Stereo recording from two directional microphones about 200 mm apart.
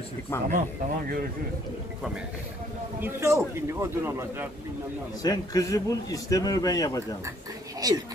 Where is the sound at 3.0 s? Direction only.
15° right (ahead or behind).